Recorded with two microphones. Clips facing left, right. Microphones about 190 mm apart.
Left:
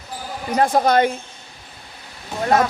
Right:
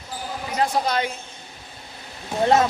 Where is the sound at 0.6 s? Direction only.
50° left (ahead or behind).